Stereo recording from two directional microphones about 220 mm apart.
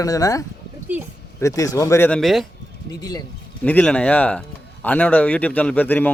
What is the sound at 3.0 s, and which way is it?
Speech, 15° left (ahead or behind).